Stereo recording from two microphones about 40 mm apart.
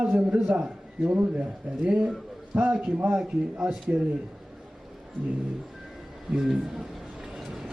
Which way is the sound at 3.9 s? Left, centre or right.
Right.